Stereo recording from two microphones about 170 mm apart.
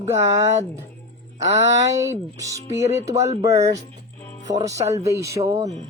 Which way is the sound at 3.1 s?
40° right (ahead or behind).